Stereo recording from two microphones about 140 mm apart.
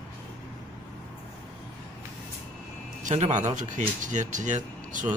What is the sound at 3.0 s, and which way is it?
Speech, 60° right (ahead or behind).